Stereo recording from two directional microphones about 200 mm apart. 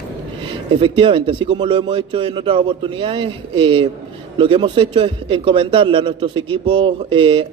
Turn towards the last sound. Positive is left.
turn(degrees=-25)  # may be behind; listen again after turning